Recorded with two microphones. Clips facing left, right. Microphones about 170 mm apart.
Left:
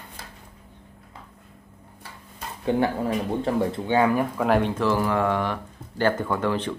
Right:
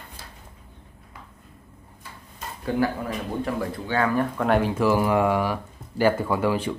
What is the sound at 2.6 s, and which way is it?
Speech, 25° left (ahead or behind).